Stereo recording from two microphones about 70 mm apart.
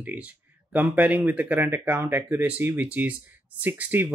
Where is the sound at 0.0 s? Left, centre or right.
Right.